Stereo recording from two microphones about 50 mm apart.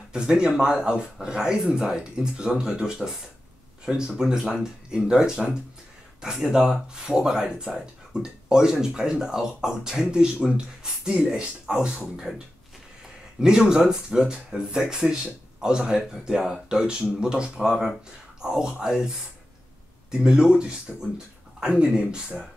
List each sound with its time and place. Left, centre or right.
0.1 s speech: centre
13.4 s speech: centre
20.2 s speech: centre